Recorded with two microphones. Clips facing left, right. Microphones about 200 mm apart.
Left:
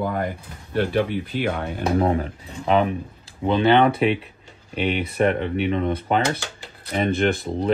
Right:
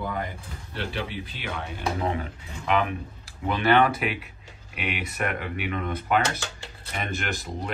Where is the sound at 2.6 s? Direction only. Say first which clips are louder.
Left 6 dB; 30° left (ahead or behind).